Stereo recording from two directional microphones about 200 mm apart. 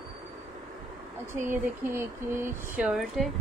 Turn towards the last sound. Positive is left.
turn(degrees=0)  # may be behind; listen again after turning